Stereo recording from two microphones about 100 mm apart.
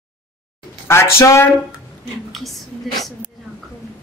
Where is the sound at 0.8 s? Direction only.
25° left (ahead or behind).